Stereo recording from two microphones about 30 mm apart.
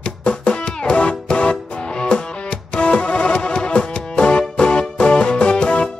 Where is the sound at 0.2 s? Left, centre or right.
Left.